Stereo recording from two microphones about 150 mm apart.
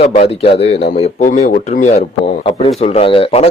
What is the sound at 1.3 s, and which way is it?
Speech, 60° left (ahead or behind).